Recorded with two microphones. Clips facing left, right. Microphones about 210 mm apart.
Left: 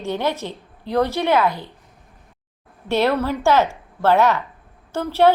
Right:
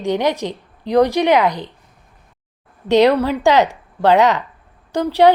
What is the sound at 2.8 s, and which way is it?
Speech, 15° right (ahead or behind).